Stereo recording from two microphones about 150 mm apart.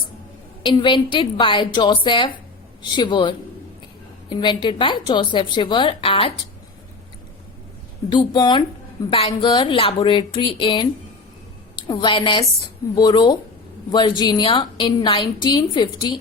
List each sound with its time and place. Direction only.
0.6 s a woman's voice: 30° left (ahead or behind)
8.1 s a woman's voice: 30° left (ahead or behind)